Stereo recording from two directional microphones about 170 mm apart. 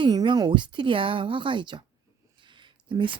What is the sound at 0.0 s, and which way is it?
Speech, 25° right (ahead or behind).